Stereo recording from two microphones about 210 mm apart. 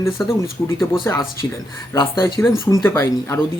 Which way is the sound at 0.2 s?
20° left (ahead or behind).